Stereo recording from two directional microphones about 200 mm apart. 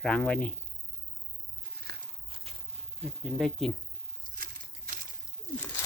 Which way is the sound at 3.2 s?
Centre (ahead or behind).